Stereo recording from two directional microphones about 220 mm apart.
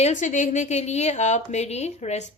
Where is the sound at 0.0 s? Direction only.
35° left (ahead or behind).